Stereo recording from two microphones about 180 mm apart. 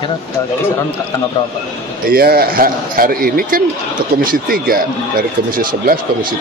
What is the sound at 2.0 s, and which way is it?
A man's voice, 55° right (ahead or behind).